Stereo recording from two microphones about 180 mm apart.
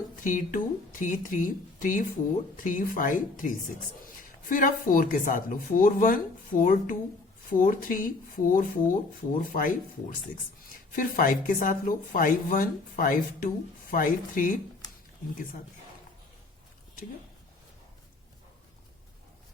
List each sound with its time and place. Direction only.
0.3 s speech: 45° left (ahead or behind)
10.9 s speech: 50° left (ahead or behind)